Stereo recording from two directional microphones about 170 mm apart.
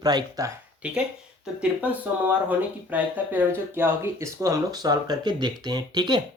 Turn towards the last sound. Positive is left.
turn(degrees=-25)  # may be behind; listen again after turning